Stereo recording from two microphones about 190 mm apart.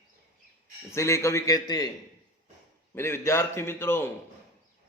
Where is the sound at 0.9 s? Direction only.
15° left (ahead or behind).